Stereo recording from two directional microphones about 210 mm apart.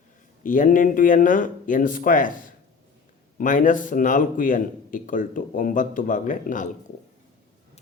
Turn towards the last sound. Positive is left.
turn(degrees=40)  # may be behind; listen again after turning